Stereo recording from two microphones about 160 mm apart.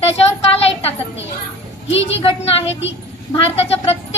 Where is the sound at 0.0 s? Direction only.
40° left (ahead or behind).